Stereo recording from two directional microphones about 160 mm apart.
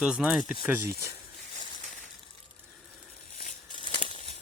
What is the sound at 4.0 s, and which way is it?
Crumpling, 50° left (ahead or behind).